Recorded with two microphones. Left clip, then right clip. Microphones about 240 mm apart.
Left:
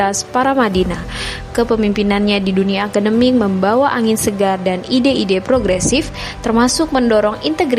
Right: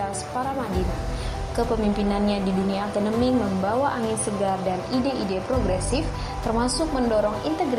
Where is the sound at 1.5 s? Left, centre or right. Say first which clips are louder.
Left 9 dB; left.